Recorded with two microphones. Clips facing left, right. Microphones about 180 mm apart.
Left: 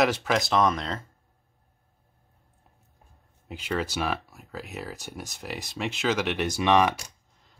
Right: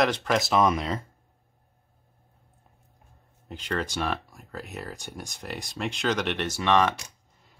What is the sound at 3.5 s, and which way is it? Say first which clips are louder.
Speech: left 1 dB; 5° left (ahead or behind).